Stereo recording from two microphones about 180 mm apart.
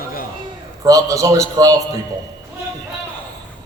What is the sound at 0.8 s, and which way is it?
Speech, 20° right (ahead or behind).